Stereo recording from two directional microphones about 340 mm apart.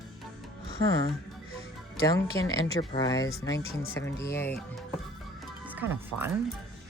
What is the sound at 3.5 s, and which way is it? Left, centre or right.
Speech, left.